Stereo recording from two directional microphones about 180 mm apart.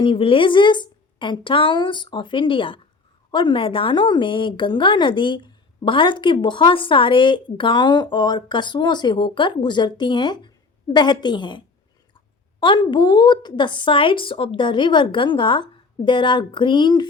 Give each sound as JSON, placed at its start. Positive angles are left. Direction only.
{"t": 0.0, "sound": "speech", "side_deg": 30}